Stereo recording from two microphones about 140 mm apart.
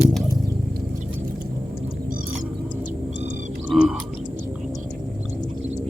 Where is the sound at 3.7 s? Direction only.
Centre (ahead or behind).